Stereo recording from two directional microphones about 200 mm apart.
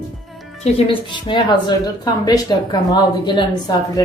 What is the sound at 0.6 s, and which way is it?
A woman's voice, 25° left (ahead or behind).